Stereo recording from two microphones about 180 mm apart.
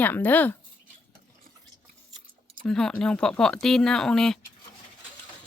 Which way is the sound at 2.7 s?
5° left (ahead or behind).